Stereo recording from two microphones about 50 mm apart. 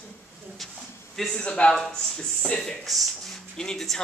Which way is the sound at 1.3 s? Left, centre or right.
Centre.